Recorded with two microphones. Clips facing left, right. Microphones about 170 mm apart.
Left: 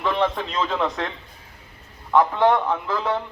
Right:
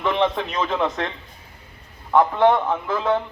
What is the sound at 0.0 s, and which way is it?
Speech, 20° right (ahead or behind).